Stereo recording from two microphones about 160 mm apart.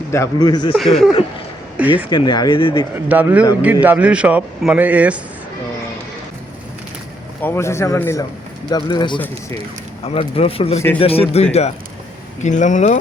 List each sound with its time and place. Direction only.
0.1 s speech: 20° left (ahead or behind)
0.8 s speech: centre (ahead or behind)
2.0 s speech: 25° left (ahead or behind)
2.9 s a man's voice: 10° right (ahead or behind)
7.4 s speech: 15° left (ahead or behind)
8.7 s speech: 30° left (ahead or behind)
12.4 s speech: 50° left (ahead or behind)